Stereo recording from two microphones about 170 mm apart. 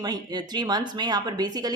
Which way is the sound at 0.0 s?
25° right (ahead or behind).